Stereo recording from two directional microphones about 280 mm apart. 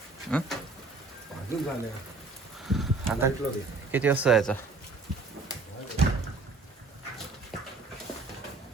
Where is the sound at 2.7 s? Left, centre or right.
Centre.